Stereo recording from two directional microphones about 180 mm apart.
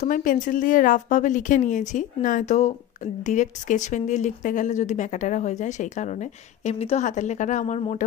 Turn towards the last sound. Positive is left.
turn(degrees=40)  # may be behind; listen again after turning